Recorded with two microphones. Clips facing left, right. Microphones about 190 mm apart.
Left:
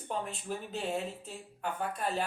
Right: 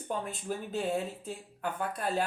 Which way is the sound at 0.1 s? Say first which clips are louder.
Right 1 dB; 45° right (ahead or behind).